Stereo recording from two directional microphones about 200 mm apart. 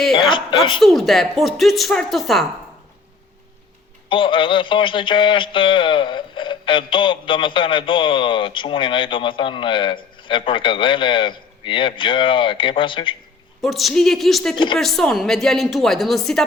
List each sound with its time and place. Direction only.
0.1 s a man's voice: 25° left (ahead or behind)
0.8 s a woman's voice: centre (ahead or behind)
4.1 s a man's voice: 25° left (ahead or behind)
13.6 s a woman's voice: centre (ahead or behind)